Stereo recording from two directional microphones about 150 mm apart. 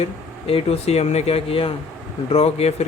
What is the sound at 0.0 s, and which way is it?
Speech, 40° left (ahead or behind).